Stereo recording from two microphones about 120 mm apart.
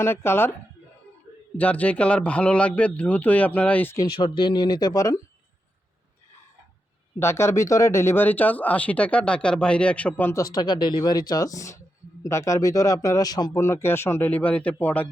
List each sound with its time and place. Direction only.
0.0 s a man's voice: 20° left (ahead or behind)
1.5 s speech: 10° left (ahead or behind)
4.2 s speech: 40° left (ahead or behind)
7.2 s speech: 20° left (ahead or behind)
10.3 s a man's voice: 35° left (ahead or behind); by 15.0 s 10° left (ahead or behind)